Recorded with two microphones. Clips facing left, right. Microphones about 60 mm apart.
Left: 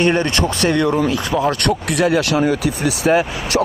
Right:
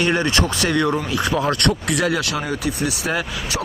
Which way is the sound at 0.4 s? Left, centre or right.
Left.